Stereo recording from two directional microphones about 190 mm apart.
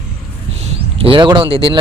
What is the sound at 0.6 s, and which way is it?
Speech, 30° right (ahead or behind).